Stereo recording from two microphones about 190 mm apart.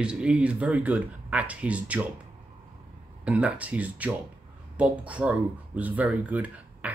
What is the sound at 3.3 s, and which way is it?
Speech, 5° right (ahead or behind).